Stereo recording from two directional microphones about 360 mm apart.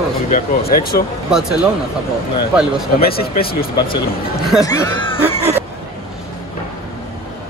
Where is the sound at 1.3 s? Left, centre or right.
Centre.